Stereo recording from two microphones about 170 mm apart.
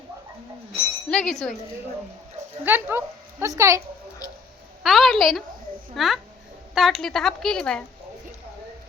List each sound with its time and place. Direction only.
1.1 s a woman's voice: centre (ahead or behind)
2.6 s speech: 10° right (ahead or behind)
4.2 s speech: 20° left (ahead or behind)
4.8 s a woman's voice: centre (ahead or behind)